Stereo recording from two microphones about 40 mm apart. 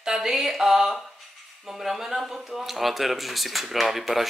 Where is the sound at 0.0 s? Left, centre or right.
Centre.